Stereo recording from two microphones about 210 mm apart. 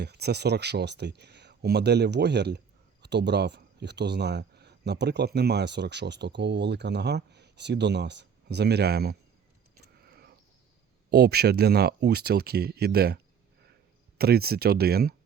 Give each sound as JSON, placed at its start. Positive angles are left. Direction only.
{"t": 0.0, "sound": "speech", "side_deg": -50}
{"t": 10.1, "sound": "a sound", "side_deg": -50}
{"t": 11.1, "sound": "speech", "side_deg": -50}
{"t": 14.2, "sound": "speech", "side_deg": -50}